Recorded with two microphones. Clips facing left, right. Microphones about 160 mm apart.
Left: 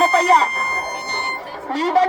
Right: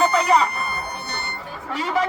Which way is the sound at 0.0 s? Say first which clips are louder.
Left 3 dB; 35° left (ahead or behind).